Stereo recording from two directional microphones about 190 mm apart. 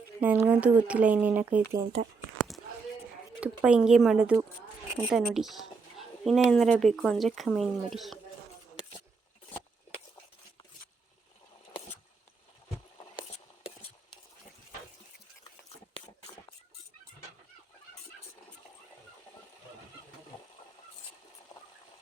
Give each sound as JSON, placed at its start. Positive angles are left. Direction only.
{"t": 0.2, "sound": "speech", "side_deg": -10}
{"t": 3.4, "sound": "a woman's voice", "side_deg": -5}
{"t": 21.5, "sound": "a sound", "side_deg": 15}